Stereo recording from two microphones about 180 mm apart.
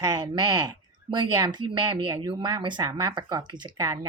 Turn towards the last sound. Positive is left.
turn(degrees=-20)  # may be behind; listen again after turning